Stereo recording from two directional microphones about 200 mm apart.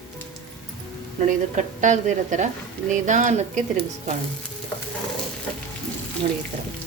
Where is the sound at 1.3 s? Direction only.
40° right (ahead or behind).